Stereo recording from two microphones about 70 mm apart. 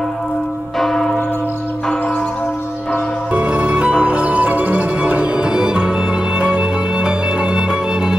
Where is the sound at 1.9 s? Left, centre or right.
Left.